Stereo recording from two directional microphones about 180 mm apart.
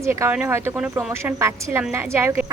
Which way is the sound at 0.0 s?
15° right (ahead or behind).